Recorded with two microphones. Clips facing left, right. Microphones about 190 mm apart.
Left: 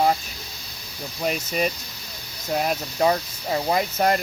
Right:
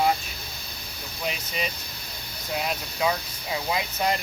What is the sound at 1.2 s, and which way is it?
Speech, 45° left (ahead or behind).